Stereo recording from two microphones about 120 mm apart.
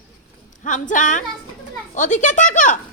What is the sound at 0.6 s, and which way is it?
A woman's voice, 90° left.